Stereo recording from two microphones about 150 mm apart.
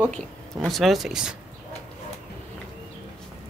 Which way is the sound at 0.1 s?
5° left (ahead or behind).